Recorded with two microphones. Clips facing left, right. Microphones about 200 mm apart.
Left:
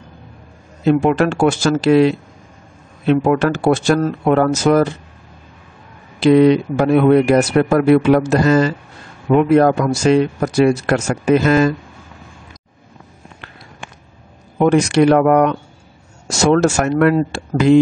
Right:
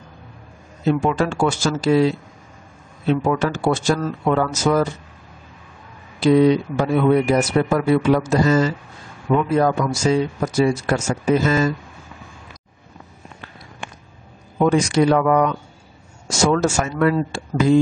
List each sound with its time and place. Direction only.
0.8 s speech: 65° left (ahead or behind)
6.1 s speech: 70° left (ahead or behind)
14.6 s speech: 65° left (ahead or behind)